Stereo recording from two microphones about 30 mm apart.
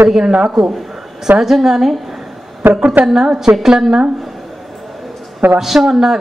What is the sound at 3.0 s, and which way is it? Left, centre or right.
Speech, centre.